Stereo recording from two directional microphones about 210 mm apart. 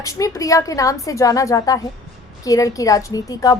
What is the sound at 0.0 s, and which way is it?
A woman's voice, 15° left (ahead or behind).